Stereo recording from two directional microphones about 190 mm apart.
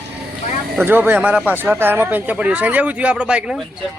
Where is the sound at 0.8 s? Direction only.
10° right (ahead or behind).